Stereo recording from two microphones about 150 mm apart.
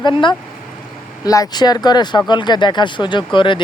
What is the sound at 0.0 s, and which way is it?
Speech, 30° left (ahead or behind).